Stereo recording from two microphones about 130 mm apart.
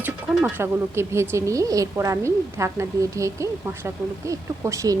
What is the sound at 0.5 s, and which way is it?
A woman's voice, 20° right (ahead or behind).